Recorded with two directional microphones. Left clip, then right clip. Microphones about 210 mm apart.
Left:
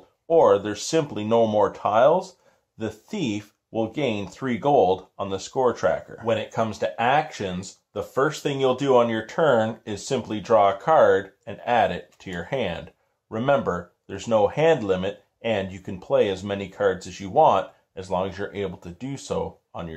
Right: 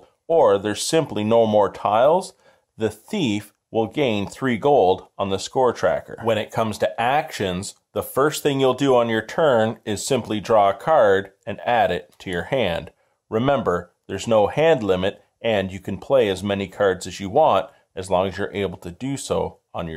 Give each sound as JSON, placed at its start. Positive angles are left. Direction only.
{"t": 0.3, "sound": "speech", "side_deg": -40}